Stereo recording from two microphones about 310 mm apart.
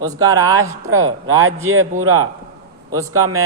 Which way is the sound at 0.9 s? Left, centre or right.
Right.